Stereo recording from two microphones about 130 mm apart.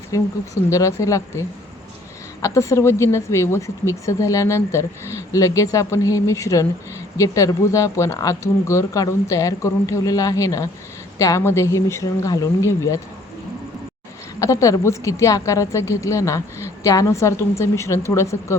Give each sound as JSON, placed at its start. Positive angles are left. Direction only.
{"t": 0.1, "sound": "speech", "side_deg": 25}
{"t": 14.3, "sound": "speech", "side_deg": 25}